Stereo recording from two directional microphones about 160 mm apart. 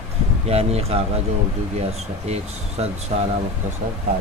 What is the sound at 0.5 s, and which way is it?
Speech, 40° right (ahead or behind).